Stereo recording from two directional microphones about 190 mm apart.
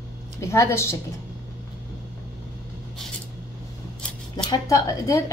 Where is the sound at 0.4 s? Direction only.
15° left (ahead or behind).